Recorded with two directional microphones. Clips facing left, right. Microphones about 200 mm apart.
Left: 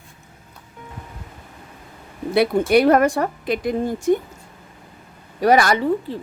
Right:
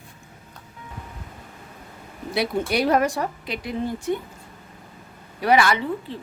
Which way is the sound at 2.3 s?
55° left (ahead or behind).